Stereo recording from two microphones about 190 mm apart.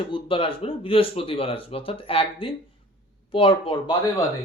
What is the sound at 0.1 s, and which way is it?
A man's voice, 25° left (ahead or behind).